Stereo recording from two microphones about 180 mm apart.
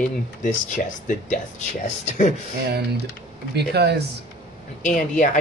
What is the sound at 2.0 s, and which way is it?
Speech, 40° left (ahead or behind).